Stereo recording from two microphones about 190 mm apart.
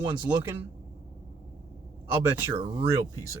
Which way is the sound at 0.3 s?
15° right (ahead or behind).